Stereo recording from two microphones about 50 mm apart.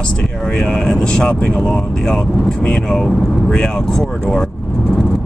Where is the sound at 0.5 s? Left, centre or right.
Centre.